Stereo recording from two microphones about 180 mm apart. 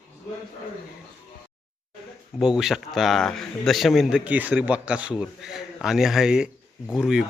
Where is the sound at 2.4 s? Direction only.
5° right (ahead or behind).